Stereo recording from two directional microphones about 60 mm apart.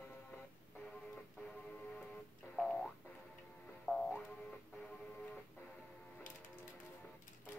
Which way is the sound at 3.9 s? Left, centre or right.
Centre.